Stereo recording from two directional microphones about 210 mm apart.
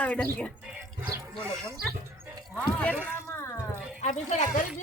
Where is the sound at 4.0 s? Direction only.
35° left (ahead or behind).